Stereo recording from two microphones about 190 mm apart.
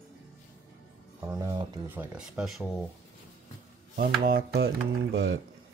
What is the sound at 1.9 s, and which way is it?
Speech, 5° right (ahead or behind).